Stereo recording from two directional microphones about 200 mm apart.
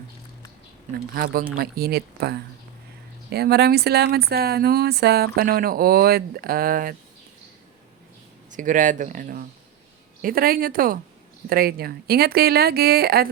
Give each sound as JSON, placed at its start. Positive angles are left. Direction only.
{"t": 1.1, "sound": "speech", "side_deg": -45}
{"t": 8.4, "sound": "speech", "side_deg": -40}